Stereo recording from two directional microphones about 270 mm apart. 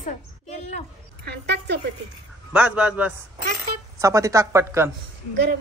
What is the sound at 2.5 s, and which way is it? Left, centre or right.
Speech, centre.